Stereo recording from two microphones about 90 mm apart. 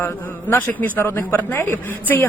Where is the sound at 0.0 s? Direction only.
20° left (ahead or behind).